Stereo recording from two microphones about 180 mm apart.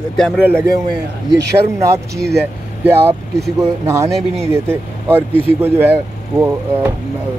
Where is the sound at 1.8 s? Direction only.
15° right (ahead or behind).